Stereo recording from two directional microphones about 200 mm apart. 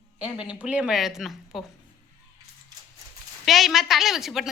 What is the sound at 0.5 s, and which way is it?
A woman's voice, 5° right (ahead or behind).